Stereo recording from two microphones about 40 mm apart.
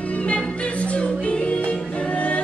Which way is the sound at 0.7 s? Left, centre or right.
Left.